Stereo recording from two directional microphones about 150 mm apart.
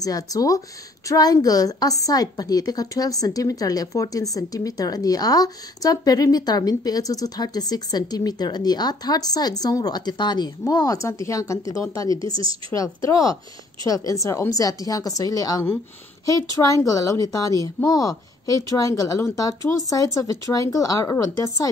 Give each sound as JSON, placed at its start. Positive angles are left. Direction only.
{"t": 0.0, "sound": "a woman's voice", "side_deg": 25}
{"t": 12.2, "sound": "speech", "side_deg": -35}
{"t": 12.7, "sound": "a woman's voice", "side_deg": 20}